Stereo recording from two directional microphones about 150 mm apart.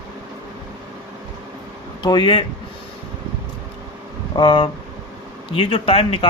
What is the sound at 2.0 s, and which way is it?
Speech, 30° left (ahead or behind).